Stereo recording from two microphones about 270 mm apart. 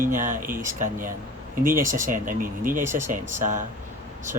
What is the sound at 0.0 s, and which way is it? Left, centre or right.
Speech, right.